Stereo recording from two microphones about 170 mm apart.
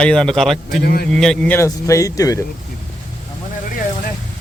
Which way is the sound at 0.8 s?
65° left (ahead or behind).